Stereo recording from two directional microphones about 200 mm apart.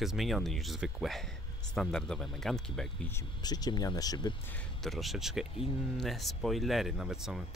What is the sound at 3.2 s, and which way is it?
Speech, 20° left (ahead or behind).